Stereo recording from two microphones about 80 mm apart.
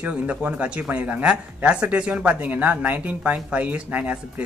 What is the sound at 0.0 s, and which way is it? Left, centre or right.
Speech, centre.